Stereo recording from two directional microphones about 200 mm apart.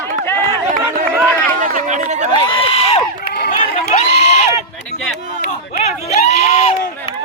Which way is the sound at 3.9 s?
35° left (ahead or behind).